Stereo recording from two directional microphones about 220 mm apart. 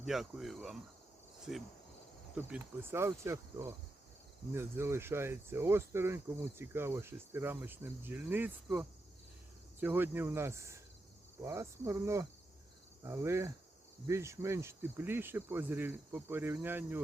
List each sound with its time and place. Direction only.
0.0 s speech: centre (ahead or behind)